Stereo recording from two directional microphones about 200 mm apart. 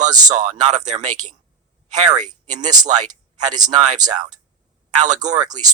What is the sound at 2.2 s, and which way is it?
Speech, 35° right (ahead or behind).